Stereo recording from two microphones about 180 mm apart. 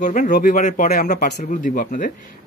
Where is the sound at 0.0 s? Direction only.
45° left (ahead or behind).